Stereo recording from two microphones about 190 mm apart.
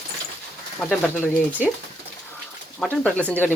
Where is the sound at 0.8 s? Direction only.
10° left (ahead or behind).